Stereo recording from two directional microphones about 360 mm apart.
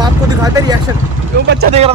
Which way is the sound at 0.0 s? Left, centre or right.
Centre.